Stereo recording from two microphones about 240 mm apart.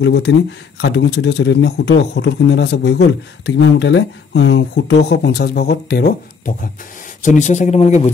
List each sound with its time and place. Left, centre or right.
0.0 s speech: left